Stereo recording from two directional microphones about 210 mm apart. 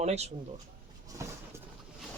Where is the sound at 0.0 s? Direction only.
30° right (ahead or behind).